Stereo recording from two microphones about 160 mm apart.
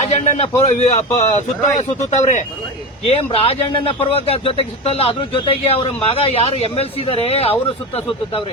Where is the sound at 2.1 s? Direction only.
45° left (ahead or behind).